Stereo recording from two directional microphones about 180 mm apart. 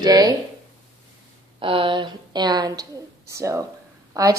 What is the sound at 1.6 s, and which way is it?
A woman's voice, 30° right (ahead or behind).